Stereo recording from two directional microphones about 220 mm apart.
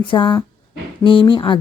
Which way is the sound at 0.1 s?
20° left (ahead or behind).